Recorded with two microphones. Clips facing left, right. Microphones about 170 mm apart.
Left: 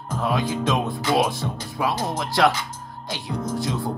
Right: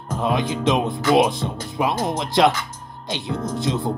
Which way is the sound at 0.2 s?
20° right (ahead or behind).